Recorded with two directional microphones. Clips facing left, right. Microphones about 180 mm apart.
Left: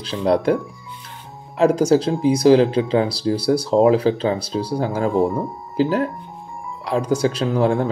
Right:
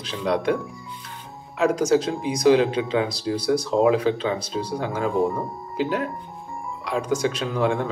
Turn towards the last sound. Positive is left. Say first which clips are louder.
# left 4 dB
turn(degrees=35)  # may be behind; listen again after turning